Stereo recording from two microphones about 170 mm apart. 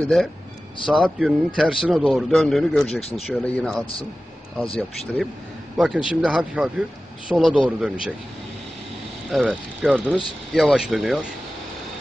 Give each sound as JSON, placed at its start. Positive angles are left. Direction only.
{"t": 0.0, "sound": "a man's voice", "side_deg": 0}
{"t": 3.0, "sound": "speech", "side_deg": 35}
{"t": 3.3, "sound": "a man's voice", "side_deg": 5}
{"t": 4.7, "sound": "a man's voice", "side_deg": 0}
{"t": 9.3, "sound": "a man's voice", "side_deg": 0}